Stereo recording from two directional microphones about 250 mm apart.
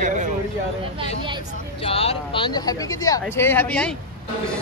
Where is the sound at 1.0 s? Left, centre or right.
Centre.